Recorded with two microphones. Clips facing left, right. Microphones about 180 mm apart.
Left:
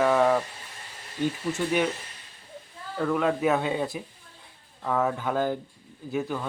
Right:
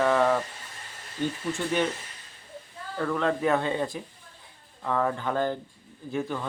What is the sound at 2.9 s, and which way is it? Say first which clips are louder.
Speech: left 2 dB; 5° left (ahead or behind).